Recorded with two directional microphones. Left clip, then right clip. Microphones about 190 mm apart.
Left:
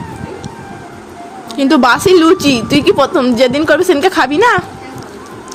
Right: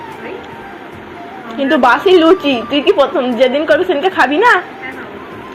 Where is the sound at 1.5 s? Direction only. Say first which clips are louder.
Left 1 dB; 50° left (ahead or behind).